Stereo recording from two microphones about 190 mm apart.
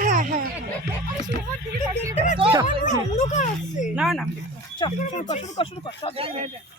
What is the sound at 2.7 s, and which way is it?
Speech, 40° left (ahead or behind).